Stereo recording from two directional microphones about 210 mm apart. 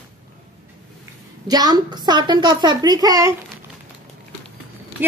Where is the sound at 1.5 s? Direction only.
20° right (ahead or behind).